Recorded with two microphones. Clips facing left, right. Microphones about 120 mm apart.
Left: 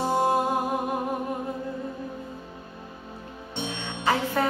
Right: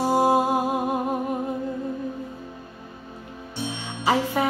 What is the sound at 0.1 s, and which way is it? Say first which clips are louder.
Music: right 4 dB; 20° right (ahead or behind).